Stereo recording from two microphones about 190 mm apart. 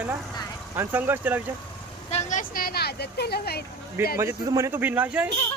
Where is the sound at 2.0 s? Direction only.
40° left (ahead or behind); by 3.6 s 55° left (ahead or behind).